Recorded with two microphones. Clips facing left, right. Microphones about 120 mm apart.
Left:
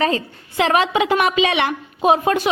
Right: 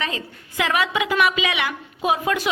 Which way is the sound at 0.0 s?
35° left (ahead or behind).